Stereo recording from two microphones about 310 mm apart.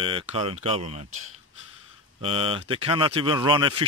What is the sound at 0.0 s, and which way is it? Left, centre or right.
Speech, centre.